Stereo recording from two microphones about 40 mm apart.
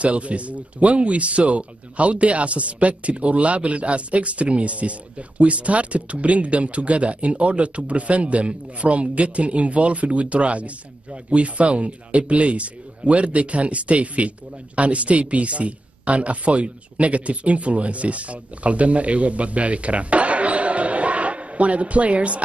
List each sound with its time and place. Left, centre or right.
0.0 s speech: right